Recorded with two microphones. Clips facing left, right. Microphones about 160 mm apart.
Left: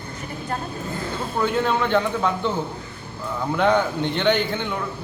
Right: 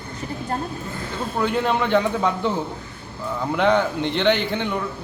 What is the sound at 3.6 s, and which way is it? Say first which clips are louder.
A man's voice: even; centre (ahead or behind).